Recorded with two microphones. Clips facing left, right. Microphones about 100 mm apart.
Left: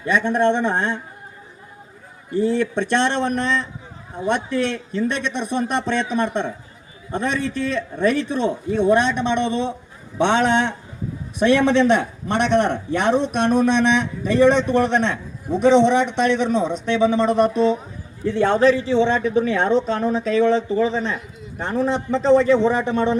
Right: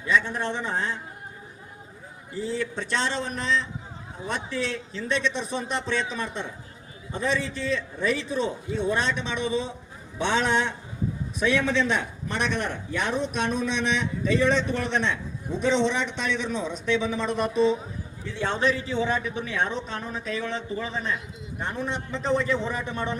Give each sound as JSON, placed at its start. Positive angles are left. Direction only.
{"t": 0.0, "sound": "a man's voice", "side_deg": 60}
{"t": 2.3, "sound": "a man's voice", "side_deg": 65}
{"t": 11.3, "sound": "a man's voice", "side_deg": 70}
{"t": 16.7, "sound": "speech", "side_deg": 0}
{"t": 18.5, "sound": "a man's voice", "side_deg": 35}